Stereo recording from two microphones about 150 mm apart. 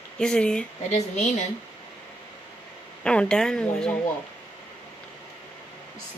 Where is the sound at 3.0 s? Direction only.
5° left (ahead or behind).